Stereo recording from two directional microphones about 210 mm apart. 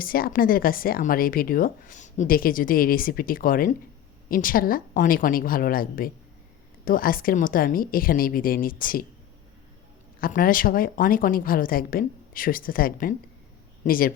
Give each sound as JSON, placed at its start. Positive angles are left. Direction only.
{"t": 0.0, "sound": "speech", "side_deg": 45}
{"t": 10.2, "sound": "speech", "side_deg": 45}